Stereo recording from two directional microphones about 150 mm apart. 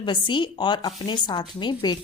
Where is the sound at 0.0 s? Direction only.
35° left (ahead or behind).